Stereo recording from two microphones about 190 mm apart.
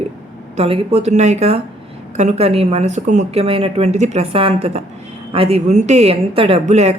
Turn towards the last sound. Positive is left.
turn(degrees=-35)  # may be behind; listen again after turning